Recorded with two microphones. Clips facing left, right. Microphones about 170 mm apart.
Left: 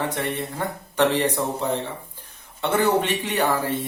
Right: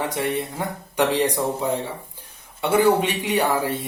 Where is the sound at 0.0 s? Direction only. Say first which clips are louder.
Right 2 dB; 10° right (ahead or behind).